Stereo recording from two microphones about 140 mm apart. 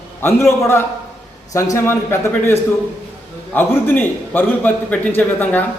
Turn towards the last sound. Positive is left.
turn(degrees=10)  # may be behind; listen again after turning